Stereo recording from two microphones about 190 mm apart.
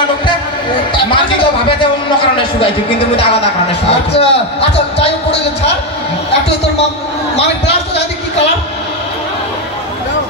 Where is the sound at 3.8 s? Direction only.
30° left (ahead or behind).